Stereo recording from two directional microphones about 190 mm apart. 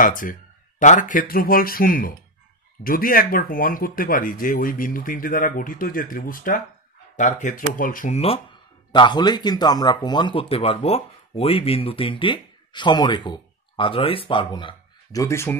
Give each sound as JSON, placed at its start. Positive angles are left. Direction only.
{"t": 0.0, "sound": "speech", "side_deg": 45}
{"t": 8.2, "sound": "speech", "side_deg": 25}